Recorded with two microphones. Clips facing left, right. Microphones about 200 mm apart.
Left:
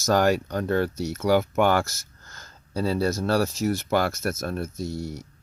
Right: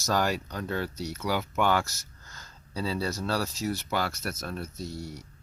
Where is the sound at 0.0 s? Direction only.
50° left (ahead or behind).